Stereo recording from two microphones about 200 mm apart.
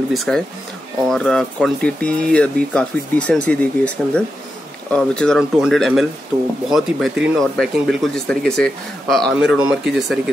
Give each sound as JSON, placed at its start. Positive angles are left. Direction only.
{"t": 0.1, "sound": "speech", "side_deg": 0}